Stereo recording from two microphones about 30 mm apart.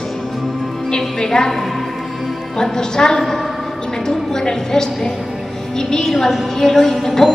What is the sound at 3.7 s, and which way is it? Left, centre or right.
Music, centre.